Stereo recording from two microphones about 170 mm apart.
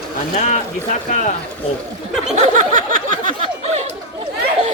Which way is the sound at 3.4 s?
40° right (ahead or behind).